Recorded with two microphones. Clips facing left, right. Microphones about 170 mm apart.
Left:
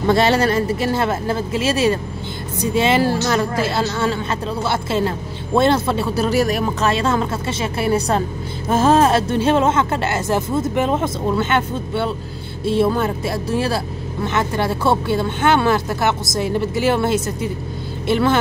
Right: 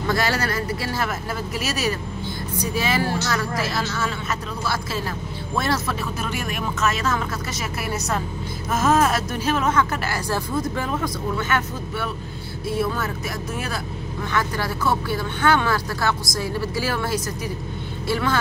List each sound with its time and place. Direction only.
0.0 s a woman's voice: 25° left (ahead or behind)